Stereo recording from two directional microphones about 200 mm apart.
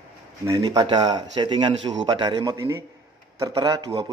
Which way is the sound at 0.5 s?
20° right (ahead or behind).